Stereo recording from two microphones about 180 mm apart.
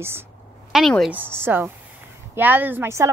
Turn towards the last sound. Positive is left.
turn(degrees=-15)  # may be behind; listen again after turning